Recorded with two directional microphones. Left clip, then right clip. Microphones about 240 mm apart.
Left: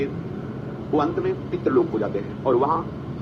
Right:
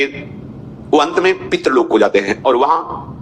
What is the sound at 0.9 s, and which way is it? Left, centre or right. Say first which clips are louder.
A man's voice: right 10 dB; right.